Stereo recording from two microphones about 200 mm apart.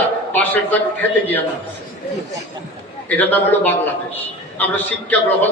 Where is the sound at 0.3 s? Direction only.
10° left (ahead or behind).